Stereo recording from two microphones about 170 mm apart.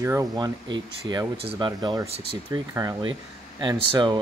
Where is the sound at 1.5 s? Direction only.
25° right (ahead or behind).